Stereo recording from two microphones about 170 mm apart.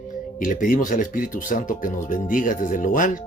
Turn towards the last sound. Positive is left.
turn(degrees=50)  # may be behind; listen again after turning